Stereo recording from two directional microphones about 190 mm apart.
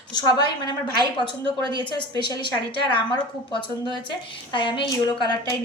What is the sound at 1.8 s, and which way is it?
Speech, 25° left (ahead or behind).